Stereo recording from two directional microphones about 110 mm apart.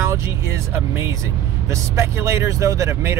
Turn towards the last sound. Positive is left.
turn(degrees=-25)  # may be behind; listen again after turning